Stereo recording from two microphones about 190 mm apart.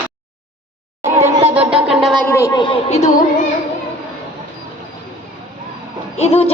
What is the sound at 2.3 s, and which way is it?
Speech, 20° left (ahead or behind).